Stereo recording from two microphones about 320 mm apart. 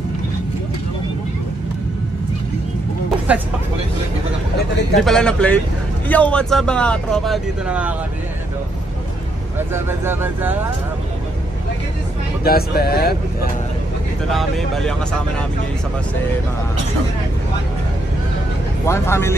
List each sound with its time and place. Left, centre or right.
3.3 s speech: centre
5.0 s speech: centre
9.6 s speech: centre
12.4 s speech: left
14.3 s speech: centre
18.9 s speech: centre